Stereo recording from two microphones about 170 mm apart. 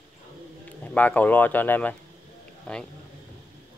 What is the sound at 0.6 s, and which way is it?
Speech, 10° left (ahead or behind).